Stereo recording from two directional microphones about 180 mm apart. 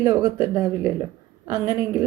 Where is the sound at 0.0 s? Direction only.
15° right (ahead or behind).